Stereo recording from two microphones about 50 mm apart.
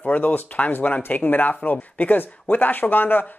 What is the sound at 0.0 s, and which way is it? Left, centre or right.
Speech, left.